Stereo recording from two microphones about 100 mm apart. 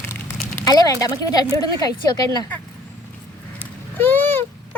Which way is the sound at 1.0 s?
40° left (ahead or behind).